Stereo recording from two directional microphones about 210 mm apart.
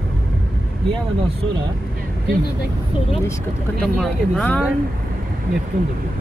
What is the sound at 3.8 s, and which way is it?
Speech, centre (ahead or behind).